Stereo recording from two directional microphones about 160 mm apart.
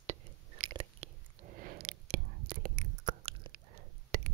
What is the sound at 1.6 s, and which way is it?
Whispering, 65° right (ahead or behind).